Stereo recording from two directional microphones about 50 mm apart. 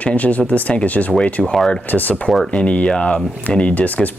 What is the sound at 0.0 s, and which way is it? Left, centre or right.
Speech, left.